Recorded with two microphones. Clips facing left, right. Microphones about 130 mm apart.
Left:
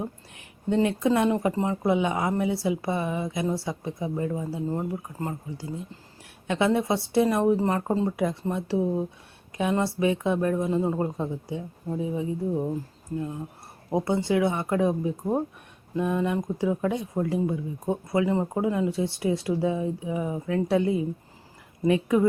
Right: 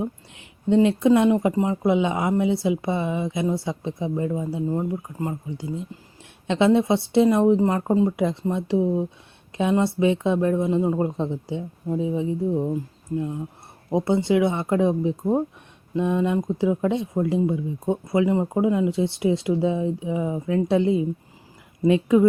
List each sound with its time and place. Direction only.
0.3 s speech: 20° right (ahead or behind)
13.9 s speech: 20° right (ahead or behind)